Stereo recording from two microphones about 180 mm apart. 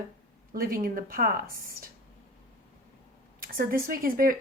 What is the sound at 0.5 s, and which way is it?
Speech, 55° right (ahead or behind).